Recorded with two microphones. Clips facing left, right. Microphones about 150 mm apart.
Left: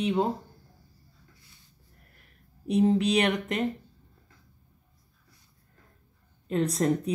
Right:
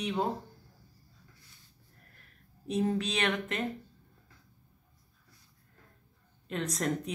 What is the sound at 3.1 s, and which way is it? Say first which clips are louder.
Speech: left 6 dB; 35° left (ahead or behind).